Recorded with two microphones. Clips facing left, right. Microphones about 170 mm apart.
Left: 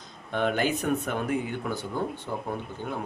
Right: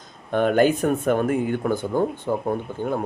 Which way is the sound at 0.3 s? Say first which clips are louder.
Right 8 dB; 50° right (ahead or behind).